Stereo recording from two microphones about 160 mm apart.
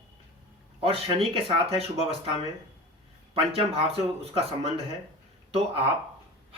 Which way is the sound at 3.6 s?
35° right (ahead or behind).